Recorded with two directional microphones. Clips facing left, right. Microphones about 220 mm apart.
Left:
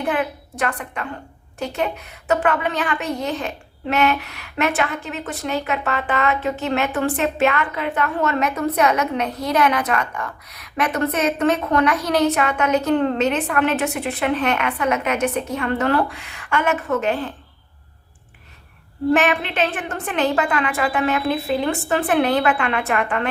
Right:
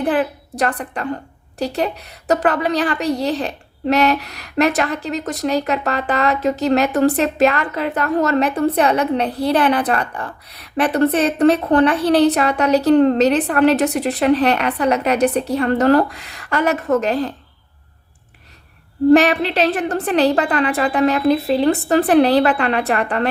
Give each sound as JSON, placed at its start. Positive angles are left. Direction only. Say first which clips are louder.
{"t": 0.0, "sound": "a woman's voice", "louder": "right 4 dB", "side_deg": -35}
{"t": 19.1, "sound": "a woman's voice", "louder": "right 6 dB", "side_deg": -35}